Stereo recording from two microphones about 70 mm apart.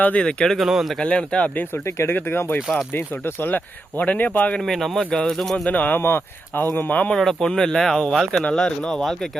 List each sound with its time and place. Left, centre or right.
0.0 s speech: centre
0.9 s speech: centre
2.0 s speech: left
4.6 s speech: centre
5.6 s speech: left
6.0 s speech: left
7.1 s speech: centre